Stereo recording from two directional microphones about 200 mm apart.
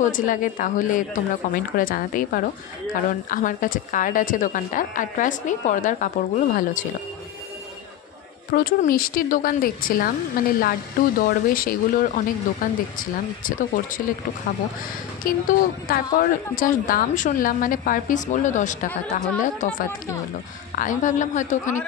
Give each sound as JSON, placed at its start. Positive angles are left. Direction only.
{"t": 0.0, "sound": "a woman's voice", "side_deg": 40}
{"t": 8.5, "sound": "speech", "side_deg": 45}
{"t": 11.1, "sound": "speech", "side_deg": 45}
{"t": 15.2, "sound": "a woman's voice", "side_deg": 45}